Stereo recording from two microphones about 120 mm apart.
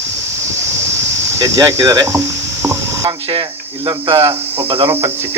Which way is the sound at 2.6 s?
30° right (ahead or behind).